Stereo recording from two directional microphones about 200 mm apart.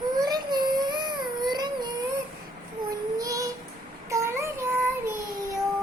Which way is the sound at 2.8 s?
15° right (ahead or behind).